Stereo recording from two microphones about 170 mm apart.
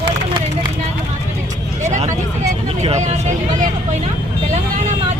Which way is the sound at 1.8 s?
45° right (ahead or behind).